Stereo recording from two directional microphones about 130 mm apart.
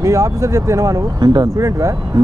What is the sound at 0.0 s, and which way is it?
Speech, 25° right (ahead or behind).